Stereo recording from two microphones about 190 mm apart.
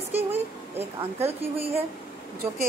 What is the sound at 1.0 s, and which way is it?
Speech, 30° right (ahead or behind).